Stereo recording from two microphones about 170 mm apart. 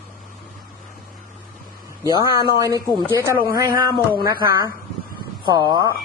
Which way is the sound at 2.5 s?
20° right (ahead or behind).